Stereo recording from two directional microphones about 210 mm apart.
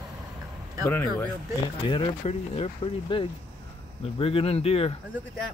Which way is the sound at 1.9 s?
25° left (ahead or behind).